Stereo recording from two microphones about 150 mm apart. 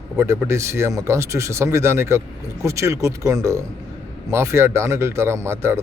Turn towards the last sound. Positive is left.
turn(degrees=-15)  # may be behind; listen again after turning